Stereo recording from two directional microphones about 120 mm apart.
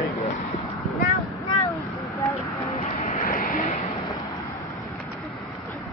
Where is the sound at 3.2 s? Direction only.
90° left.